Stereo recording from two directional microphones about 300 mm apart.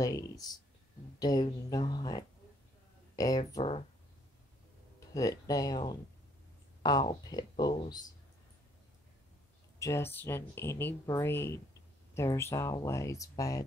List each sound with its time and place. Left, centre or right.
0.0 s speech: centre
5.1 s speech: centre
9.8 s speech: centre